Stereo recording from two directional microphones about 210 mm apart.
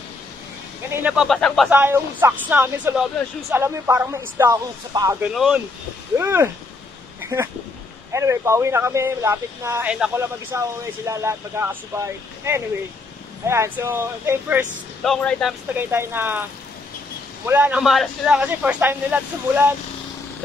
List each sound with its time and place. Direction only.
0.9 s speech: 5° right (ahead or behind)
1.7 s speech: 10° right (ahead or behind)
5.3 s speech: centre (ahead or behind)
6.1 s speech: 10° right (ahead or behind)
7.2 s a sound: 10° right (ahead or behind)
8.1 s speech: 15° right (ahead or behind)
15.0 s speech: centre (ahead or behind)
15.7 s speech: 10° right (ahead or behind)
17.5 s speech: 5° right (ahead or behind)